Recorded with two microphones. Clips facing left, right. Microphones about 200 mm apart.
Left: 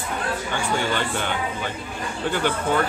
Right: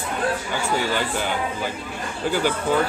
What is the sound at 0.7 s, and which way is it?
Speech, 5° right (ahead or behind).